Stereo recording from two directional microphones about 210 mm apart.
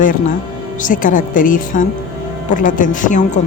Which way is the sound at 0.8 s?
40° left (ahead or behind).